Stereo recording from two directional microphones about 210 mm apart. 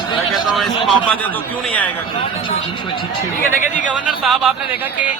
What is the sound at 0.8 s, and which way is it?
A man's voice, 5° left (ahead or behind).